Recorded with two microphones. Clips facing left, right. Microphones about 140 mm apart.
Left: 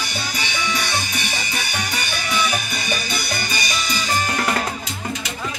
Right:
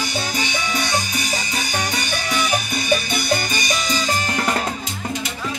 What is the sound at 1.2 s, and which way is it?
Music, 40° right (ahead or behind).